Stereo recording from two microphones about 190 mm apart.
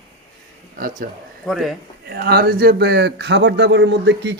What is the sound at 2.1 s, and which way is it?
Speech, 55° right (ahead or behind).